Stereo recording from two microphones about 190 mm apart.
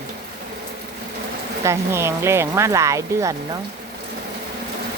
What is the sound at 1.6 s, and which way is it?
Speech, 15° right (ahead or behind).